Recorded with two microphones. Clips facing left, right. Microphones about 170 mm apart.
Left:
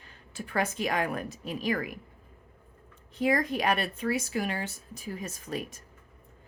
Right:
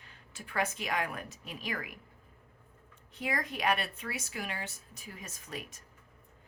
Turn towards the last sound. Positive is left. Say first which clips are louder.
# left 8 dB
turn(degrees=35)  # may be behind; listen again after turning